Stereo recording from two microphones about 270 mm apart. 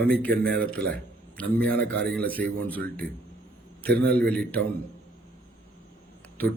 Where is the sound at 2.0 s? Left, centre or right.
Right.